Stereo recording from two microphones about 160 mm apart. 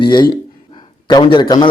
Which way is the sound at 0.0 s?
30° left (ahead or behind).